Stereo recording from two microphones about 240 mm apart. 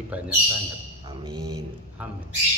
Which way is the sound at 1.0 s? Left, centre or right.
Centre.